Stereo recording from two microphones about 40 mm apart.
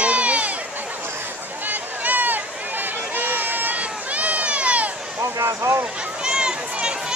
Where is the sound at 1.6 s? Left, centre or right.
Right.